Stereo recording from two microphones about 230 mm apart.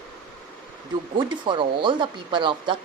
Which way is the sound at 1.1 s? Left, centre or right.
Right.